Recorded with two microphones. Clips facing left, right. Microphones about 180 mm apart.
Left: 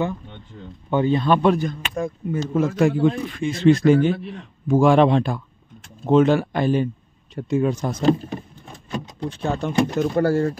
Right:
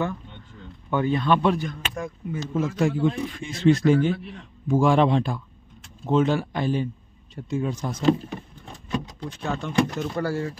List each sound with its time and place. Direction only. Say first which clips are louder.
0.8 s speech: left 4 dB; 25° left (ahead or behind)
1.3 s speech: left 3 dB; 50° left (ahead or behind)
1.7 s speech: left 5 dB; 30° left (ahead or behind)
2.3 s a man's voice: left 5 dB; 60° left (ahead or behind)
9.3 s speech: left 4 dB; 30° left (ahead or behind)
9.9 s speech: left 8 dB; 50° left (ahead or behind)